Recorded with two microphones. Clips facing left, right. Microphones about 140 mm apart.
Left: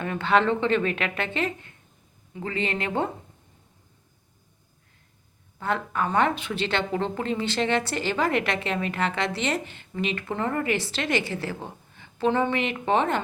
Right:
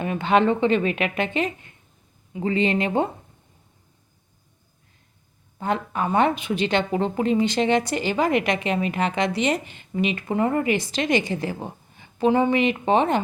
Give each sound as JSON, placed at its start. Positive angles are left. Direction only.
{"t": 0.0, "sound": "a woman's voice", "side_deg": -15}
{"t": 5.5, "sound": "a woman's voice", "side_deg": -20}